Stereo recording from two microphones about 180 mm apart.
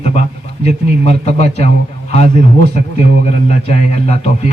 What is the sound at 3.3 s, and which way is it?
Speech, 35° left (ahead or behind).